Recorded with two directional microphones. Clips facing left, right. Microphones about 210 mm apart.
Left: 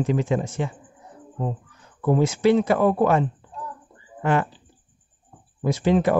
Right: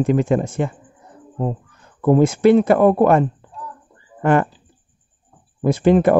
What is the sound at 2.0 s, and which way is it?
Speech, 55° right (ahead or behind).